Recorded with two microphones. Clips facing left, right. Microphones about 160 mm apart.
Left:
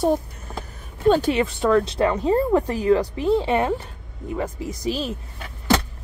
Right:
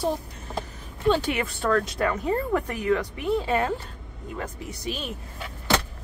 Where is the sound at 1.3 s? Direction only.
20° left (ahead or behind).